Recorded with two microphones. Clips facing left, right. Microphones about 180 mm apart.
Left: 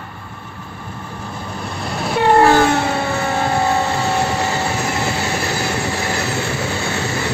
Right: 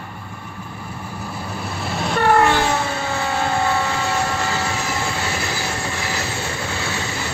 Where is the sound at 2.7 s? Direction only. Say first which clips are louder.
Left 4 dB; 65° left (ahead or behind).